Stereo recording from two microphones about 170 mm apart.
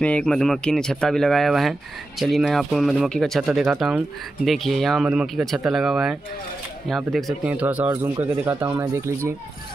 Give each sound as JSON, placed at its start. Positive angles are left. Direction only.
{"t": 0.0, "sound": "speech", "side_deg": 5}
{"t": 4.5, "sound": "speech", "side_deg": 0}